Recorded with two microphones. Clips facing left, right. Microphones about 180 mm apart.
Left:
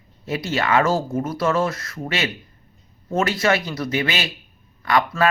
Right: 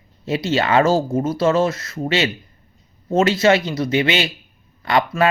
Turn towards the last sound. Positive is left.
turn(degrees=-25)  # may be behind; listen again after turning